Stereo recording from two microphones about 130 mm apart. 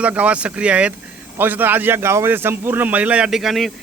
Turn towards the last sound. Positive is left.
turn(degrees=0)  # may be behind; listen again after turning